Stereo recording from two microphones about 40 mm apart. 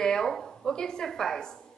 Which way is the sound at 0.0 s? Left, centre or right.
Centre.